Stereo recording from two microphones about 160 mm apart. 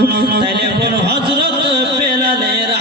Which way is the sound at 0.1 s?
90° right.